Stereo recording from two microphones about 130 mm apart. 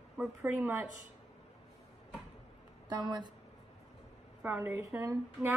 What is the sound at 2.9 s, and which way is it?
Speech, 35° right (ahead or behind).